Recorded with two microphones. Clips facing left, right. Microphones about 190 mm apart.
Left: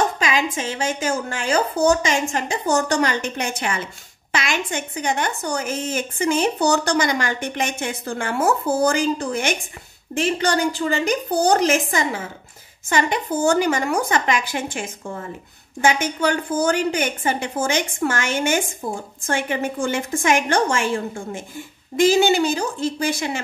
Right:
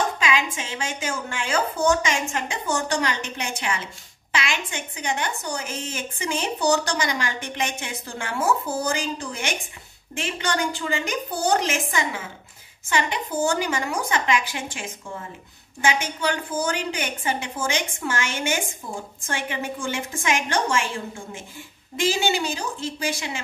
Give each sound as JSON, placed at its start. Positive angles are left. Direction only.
{"t": 0.2, "sound": "a woman's voice", "side_deg": 40}
{"t": 10.1, "sound": "a woman's voice", "side_deg": 40}
{"t": 22.0, "sound": "a woman's voice", "side_deg": 45}